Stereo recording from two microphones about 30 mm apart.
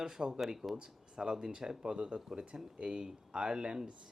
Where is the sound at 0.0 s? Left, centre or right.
Right.